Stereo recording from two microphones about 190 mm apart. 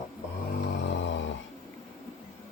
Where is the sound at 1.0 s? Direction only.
75° left (ahead or behind).